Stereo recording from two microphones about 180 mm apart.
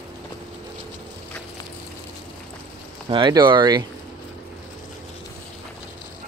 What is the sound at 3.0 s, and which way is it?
Speech, 25° right (ahead or behind).